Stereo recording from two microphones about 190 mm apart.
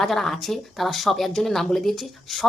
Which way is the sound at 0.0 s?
Centre (ahead or behind).